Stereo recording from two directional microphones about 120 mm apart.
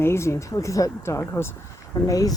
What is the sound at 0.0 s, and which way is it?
Speech, 20° left (ahead or behind).